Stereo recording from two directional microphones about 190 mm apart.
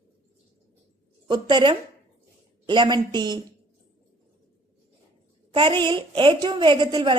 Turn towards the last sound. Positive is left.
turn(degrees=-25)  # may be behind; listen again after turning